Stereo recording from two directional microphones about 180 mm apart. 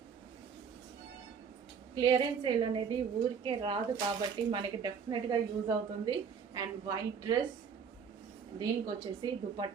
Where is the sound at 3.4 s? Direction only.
25° right (ahead or behind).